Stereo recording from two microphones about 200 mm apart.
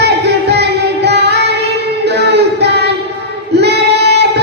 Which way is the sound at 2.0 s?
55° right (ahead or behind).